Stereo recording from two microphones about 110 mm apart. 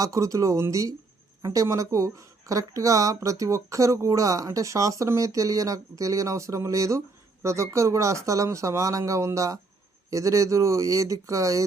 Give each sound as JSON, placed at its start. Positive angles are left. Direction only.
{"t": 0.0, "sound": "a woman's voice", "side_deg": -30}